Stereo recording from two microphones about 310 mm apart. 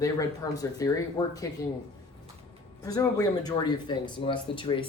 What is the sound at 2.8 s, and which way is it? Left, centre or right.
Speech, centre.